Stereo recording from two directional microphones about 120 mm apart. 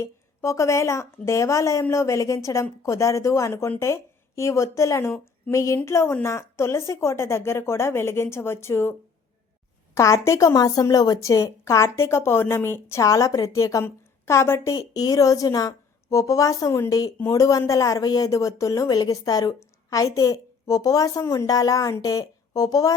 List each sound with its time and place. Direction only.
0.0 s a woman's voice: 25° left (ahead or behind)